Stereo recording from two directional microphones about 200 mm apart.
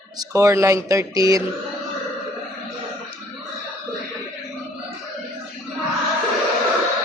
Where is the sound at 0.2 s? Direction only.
15° right (ahead or behind).